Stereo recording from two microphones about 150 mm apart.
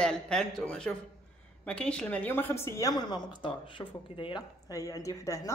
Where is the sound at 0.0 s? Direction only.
5° left (ahead or behind).